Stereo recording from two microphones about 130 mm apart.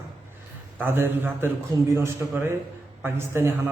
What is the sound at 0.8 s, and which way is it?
A man's voice, 15° right (ahead or behind).